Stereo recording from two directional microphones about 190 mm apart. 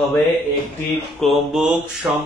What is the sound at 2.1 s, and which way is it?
Speech, 15° right (ahead or behind).